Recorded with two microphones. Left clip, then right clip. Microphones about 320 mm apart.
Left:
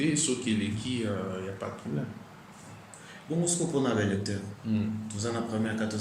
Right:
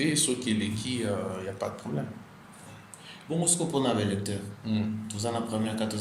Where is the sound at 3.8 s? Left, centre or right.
Centre.